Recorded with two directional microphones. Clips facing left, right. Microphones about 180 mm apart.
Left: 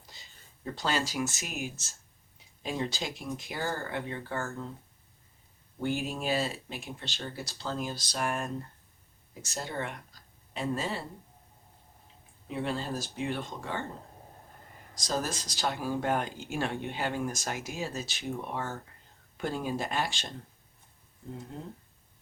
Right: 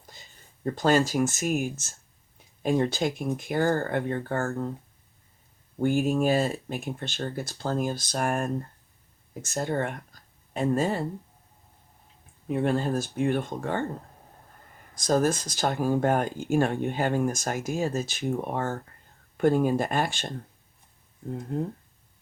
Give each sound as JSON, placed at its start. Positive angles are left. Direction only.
{"t": 0.0, "sound": "speech", "side_deg": -50}
{"t": 5.8, "sound": "speech", "side_deg": -50}
{"t": 12.5, "sound": "speech", "side_deg": -50}
{"t": 14.9, "sound": "speech", "side_deg": -55}
{"t": 21.5, "sound": "speech", "side_deg": -60}